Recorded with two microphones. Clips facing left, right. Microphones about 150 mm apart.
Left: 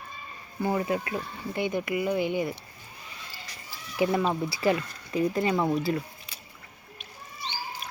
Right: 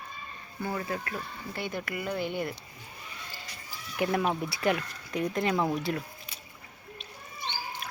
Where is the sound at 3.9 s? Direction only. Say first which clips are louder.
Left 3 dB; 5° left (ahead or behind).